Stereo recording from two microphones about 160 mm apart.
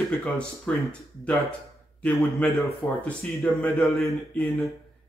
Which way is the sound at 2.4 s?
5° left (ahead or behind).